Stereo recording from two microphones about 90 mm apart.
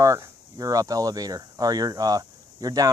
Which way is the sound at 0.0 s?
40° right (ahead or behind).